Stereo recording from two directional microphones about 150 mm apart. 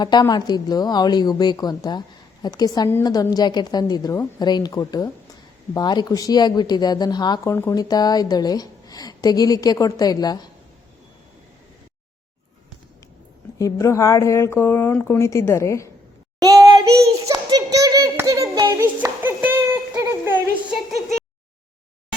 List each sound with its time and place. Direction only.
0.0 s a woman's voice: 30° left (ahead or behind)
7.5 s a woman's voice: 20° left (ahead or behind)
13.6 s a woman's voice: 20° left (ahead or behind)
16.4 s a sound: 25° right (ahead or behind)